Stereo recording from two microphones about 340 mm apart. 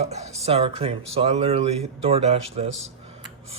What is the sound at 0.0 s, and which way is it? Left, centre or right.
Speech, centre.